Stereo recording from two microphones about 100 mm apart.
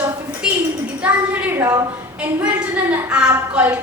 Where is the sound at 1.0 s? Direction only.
15° right (ahead or behind).